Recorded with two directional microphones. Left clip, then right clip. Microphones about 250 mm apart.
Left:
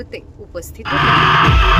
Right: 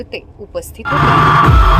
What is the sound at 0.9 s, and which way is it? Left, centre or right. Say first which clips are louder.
Speech: right 2 dB; right.